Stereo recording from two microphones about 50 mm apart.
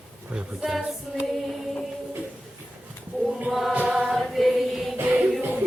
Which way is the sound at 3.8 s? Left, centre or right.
Right.